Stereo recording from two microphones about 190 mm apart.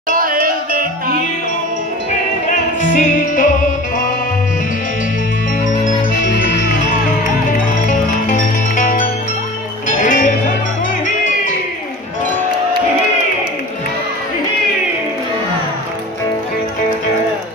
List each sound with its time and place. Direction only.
0.1 s music: 50° right (ahead or behind)
2.5 s music: 40° left (ahead or behind)
7.9 s music: 40° left (ahead or behind)